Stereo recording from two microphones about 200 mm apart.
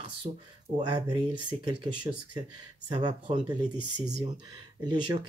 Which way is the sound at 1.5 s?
25° right (ahead or behind).